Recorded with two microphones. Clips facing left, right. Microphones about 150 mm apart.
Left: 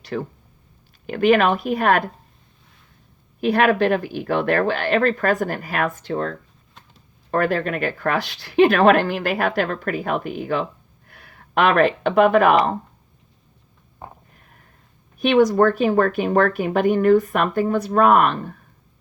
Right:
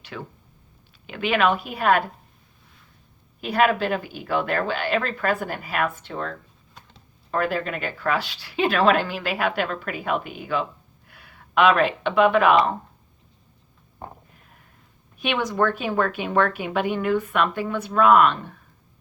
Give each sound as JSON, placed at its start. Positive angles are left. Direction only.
{"t": 0.0, "sound": "speech", "side_deg": 40}
{"t": 3.7, "sound": "speech", "side_deg": 50}
{"t": 14.3, "sound": "a sound", "side_deg": 45}
{"t": 15.2, "sound": "speech", "side_deg": 40}